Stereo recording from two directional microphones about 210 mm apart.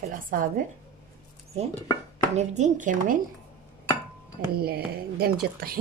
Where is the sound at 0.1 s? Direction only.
40° right (ahead or behind).